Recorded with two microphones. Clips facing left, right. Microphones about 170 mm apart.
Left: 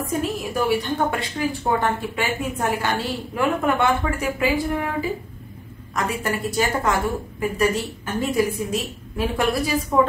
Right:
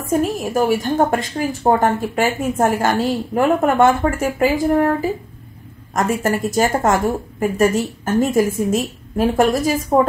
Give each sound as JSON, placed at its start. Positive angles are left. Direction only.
{"t": 0.0, "sound": "a woman's voice", "side_deg": -45}